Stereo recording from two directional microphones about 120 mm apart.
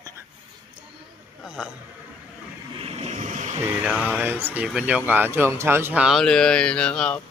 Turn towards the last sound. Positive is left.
turn(degrees=5)  # may be behind; listen again after turning